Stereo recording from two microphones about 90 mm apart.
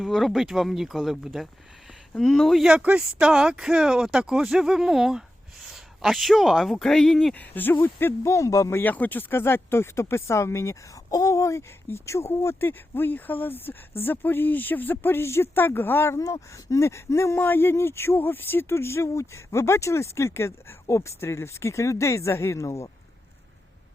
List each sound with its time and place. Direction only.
0.0 s speech: centre (ahead or behind)
7.3 s speech: 20° left (ahead or behind); by 8.8 s 35° left (ahead or behind)
8.8 s speech: 20° left (ahead or behind); by 22.9 s 35° left (ahead or behind)